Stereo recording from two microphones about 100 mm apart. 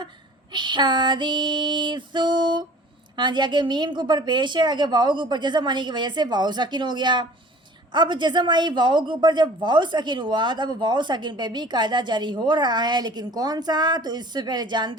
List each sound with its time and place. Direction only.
0.5 s a woman's voice: 50° right (ahead or behind)